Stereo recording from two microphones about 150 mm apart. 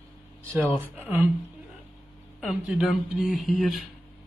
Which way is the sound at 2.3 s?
5° right (ahead or behind).